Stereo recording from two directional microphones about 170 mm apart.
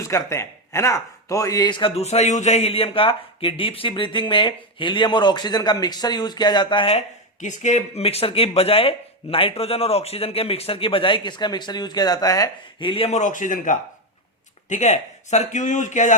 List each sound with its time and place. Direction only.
0.0 s a man's voice: 15° left (ahead or behind)
12.9 s a man's voice: 35° left (ahead or behind)